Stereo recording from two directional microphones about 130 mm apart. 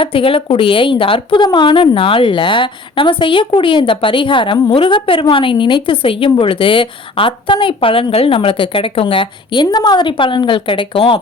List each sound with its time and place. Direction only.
0.0 s a woman's voice: 45° left (ahead or behind)